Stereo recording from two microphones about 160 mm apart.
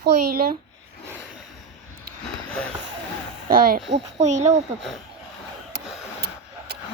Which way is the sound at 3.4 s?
65° right (ahead or behind).